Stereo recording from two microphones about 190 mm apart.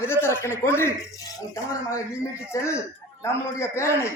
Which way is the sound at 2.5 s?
15° left (ahead or behind).